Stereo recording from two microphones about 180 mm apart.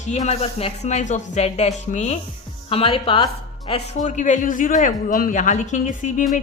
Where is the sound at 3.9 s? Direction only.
45° left (ahead or behind).